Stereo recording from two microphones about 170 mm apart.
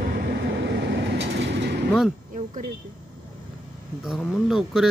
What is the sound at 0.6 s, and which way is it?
Train, 90° right.